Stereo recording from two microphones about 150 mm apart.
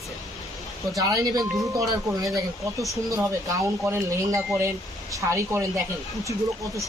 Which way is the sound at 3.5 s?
20° right (ahead or behind).